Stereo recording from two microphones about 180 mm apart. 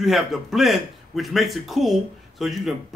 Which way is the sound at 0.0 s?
Centre (ahead or behind).